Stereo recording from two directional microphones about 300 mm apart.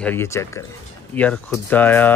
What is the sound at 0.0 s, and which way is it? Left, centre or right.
Speech, centre.